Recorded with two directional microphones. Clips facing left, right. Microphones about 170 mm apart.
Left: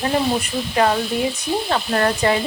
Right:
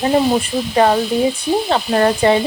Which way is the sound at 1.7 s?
25° right (ahead or behind).